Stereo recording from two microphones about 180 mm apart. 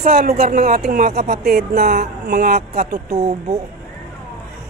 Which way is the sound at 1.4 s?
60° right (ahead or behind).